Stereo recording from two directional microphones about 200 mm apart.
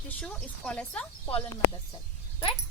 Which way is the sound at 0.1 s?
5° left (ahead or behind).